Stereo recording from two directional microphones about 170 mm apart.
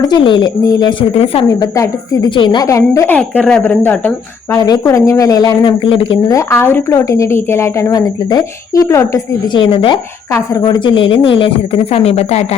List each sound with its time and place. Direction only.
0.0 s speech: 25° left (ahead or behind)
1.2 s a woman's voice: 35° left (ahead or behind)
1.5 s speech: 20° left (ahead or behind)
3.2 s a woman's voice: 10° left (ahead or behind)
4.5 s speech: 20° left (ahead or behind)
9.6 s a woman's voice: 30° left (ahead or behind)